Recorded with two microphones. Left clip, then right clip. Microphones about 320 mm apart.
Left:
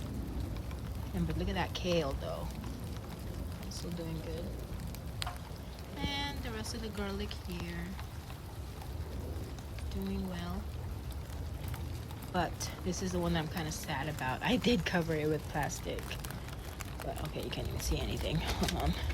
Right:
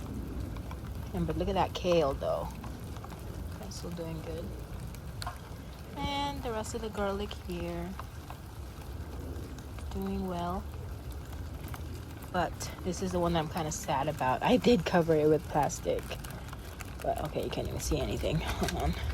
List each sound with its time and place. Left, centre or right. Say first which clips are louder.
1.1 s speech: right 7 dB; centre
6.0 s speech: right 4 dB; centre
9.9 s speech: right 5 dB; centre
12.3 s speech: right 3 dB; centre